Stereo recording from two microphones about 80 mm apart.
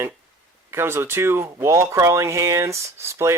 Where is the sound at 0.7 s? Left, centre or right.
Right.